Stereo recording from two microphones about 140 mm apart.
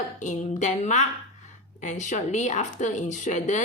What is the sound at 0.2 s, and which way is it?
Speech, 55° left (ahead or behind).